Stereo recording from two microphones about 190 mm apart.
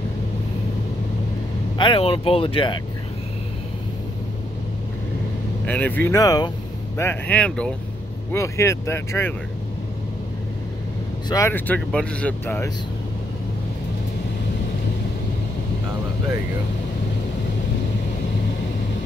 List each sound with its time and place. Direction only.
1.8 s speech: 25° left (ahead or behind)
5.7 s speech: 10° left (ahead or behind)
11.2 s speech: 15° left (ahead or behind)